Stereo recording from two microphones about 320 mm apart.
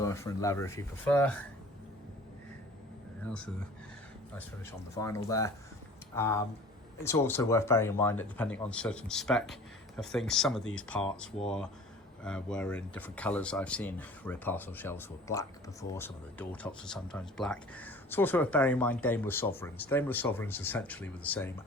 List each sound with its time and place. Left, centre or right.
0.0 s speech: centre
3.2 s speech: centre
4.9 s speech: centre